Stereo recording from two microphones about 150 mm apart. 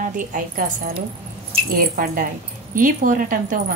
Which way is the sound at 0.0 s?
60° right (ahead or behind).